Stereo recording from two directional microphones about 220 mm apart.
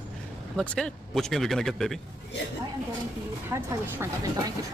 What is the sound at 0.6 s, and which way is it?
Speech, 5° left (ahead or behind).